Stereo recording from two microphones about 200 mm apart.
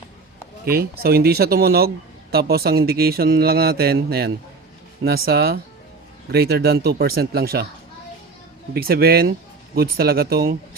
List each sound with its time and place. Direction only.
0.6 s speech: 50° right (ahead or behind)
8.7 s speech: 50° right (ahead or behind)